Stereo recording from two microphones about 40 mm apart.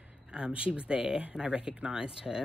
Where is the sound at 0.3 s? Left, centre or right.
Right.